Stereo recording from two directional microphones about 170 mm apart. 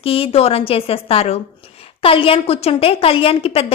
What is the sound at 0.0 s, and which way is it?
A woman's voice, 35° left (ahead or behind).